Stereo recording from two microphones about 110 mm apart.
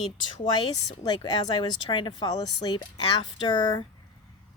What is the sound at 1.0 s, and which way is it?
Speech, 40° left (ahead or behind).